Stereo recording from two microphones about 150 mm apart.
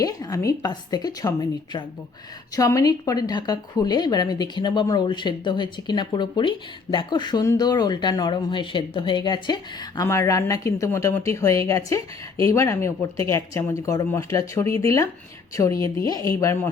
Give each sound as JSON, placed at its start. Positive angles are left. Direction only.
{"t": 0.0, "sound": "speech", "side_deg": 25}